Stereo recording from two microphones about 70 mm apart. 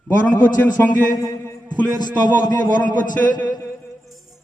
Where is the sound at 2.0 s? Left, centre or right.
Left.